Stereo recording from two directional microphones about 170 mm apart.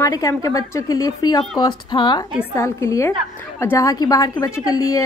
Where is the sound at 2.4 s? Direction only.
15° left (ahead or behind).